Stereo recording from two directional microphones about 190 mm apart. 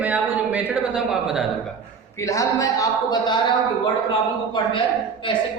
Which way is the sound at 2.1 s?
15° left (ahead or behind).